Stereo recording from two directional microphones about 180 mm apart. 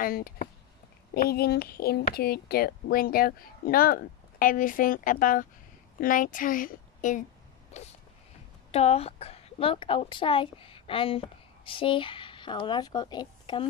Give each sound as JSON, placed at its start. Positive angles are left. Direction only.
{"t": 0.0, "sound": "a woman's voice", "side_deg": 50}
{"t": 7.7, "sound": "a sound", "side_deg": 40}
{"t": 8.7, "sound": "a woman's voice", "side_deg": 35}